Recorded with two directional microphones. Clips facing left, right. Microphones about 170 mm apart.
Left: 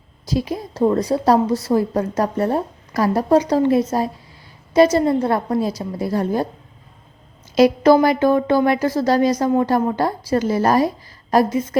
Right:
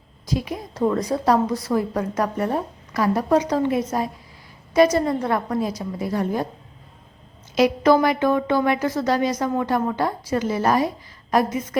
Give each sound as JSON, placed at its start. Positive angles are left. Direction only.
{"t": 0.3, "sound": "a woman's voice", "side_deg": 30}
{"t": 7.5, "sound": "a woman's voice", "side_deg": 35}